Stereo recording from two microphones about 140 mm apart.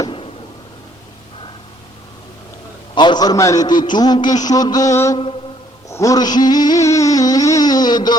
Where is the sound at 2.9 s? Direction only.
35° left (ahead or behind).